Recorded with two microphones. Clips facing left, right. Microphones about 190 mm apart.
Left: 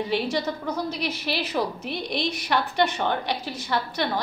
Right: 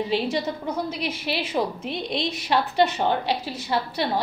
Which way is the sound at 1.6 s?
20° right (ahead or behind).